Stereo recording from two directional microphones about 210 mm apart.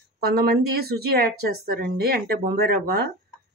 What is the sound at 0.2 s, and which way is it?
A woman's voice, 50° right (ahead or behind).